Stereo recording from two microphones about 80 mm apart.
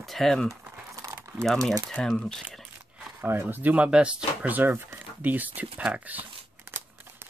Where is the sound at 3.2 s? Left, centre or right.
Right.